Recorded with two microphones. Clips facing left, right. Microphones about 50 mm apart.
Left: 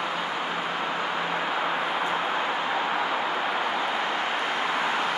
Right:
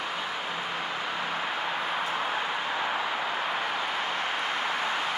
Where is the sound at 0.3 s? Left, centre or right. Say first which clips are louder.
Left 4 dB; left.